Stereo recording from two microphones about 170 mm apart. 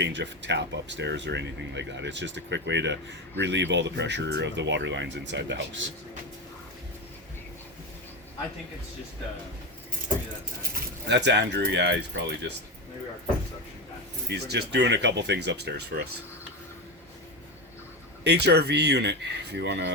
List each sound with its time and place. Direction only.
0.0 s speech: 90° right
10.6 s speech: 75° right (ahead or behind); by 12.5 s 90° right
14.3 s speech: 80° right
18.2 s speech: 80° right